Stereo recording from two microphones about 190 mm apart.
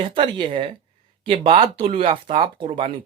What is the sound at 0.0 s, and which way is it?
Speech, 30° right (ahead or behind).